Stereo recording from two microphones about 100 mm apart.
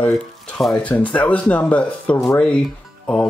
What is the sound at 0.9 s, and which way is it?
Speech, 15° left (ahead or behind).